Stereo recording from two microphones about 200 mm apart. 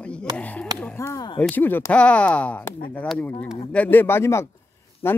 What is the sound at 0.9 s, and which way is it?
Speech, 15° left (ahead or behind).